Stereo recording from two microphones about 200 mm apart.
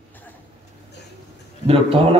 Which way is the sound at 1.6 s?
30° right (ahead or behind).